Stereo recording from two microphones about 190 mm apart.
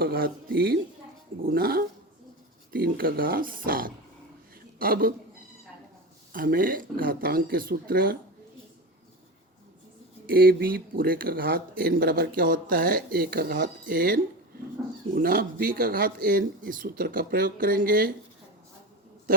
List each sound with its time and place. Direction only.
0.0 s speech: 50° right (ahead or behind)
6.3 s speech: 45° right (ahead or behind)
10.2 s speech: 50° right (ahead or behind)